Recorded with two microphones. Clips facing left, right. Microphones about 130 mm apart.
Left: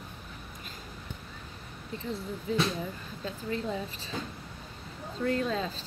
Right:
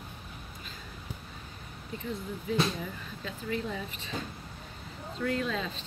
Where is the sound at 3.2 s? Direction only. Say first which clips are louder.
Left 1 dB; 30° left (ahead or behind).